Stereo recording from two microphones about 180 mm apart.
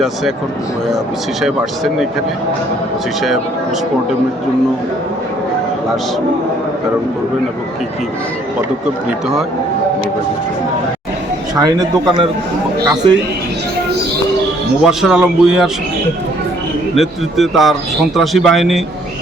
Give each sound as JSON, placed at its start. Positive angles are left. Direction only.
{"t": 1.4, "sound": "speech", "side_deg": 0}
{"t": 11.6, "sound": "a man's voice", "side_deg": -20}
{"t": 14.8, "sound": "speech", "side_deg": -5}
{"t": 16.9, "sound": "speech", "side_deg": 0}